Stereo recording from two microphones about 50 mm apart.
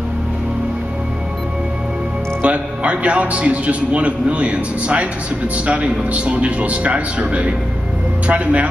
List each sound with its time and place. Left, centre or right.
2.4 s a man's voice: right